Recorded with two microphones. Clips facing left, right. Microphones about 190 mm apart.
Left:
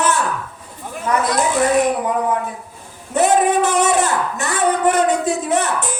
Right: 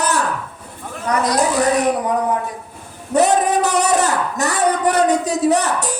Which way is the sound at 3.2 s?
40° right (ahead or behind).